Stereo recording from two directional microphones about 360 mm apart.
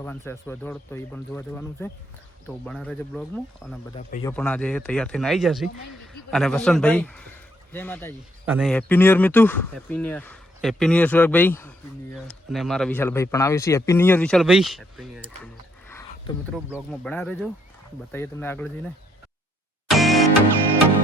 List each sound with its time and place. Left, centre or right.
0.0 s speech: centre
3.9 s speech: centre
4.3 s speech: centre
15.9 s a sound: centre
16.6 s speech: centre
19.9 s music: centre